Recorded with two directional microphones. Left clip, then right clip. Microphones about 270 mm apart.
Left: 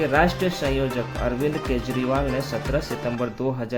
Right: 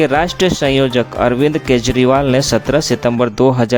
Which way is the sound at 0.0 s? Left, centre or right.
Right.